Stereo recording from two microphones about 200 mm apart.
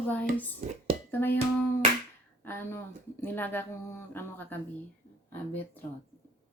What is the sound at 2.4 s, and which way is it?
Speech, 10° left (ahead or behind).